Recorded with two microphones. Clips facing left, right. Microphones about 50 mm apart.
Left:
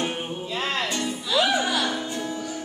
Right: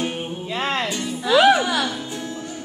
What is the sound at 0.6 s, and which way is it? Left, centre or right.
Music, right.